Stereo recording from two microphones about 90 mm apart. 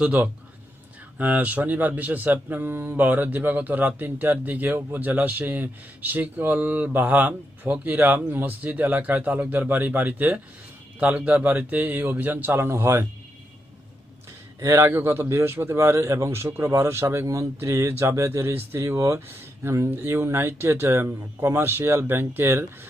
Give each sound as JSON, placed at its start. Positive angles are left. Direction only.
{"t": 0.0, "sound": "speech", "side_deg": -15}
{"t": 14.6, "sound": "speech", "side_deg": -30}